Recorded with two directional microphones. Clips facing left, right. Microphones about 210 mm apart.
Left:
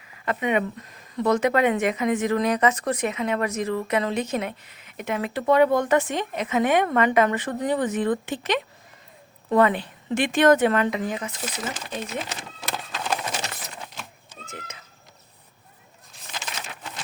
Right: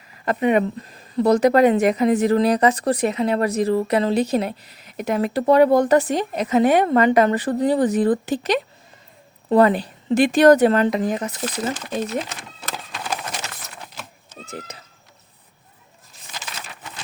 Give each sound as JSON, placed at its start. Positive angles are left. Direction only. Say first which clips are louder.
{"t": 0.3, "sound": "a woman's voice", "louder": "right 5 dB", "side_deg": -40}
{"t": 12.7, "sound": "a sound", "louder": "left 1 dB", "side_deg": -5}
{"t": 14.4, "sound": "speech", "louder": "right 6 dB", "side_deg": -35}